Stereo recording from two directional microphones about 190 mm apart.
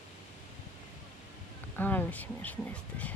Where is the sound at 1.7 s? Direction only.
10° left (ahead or behind).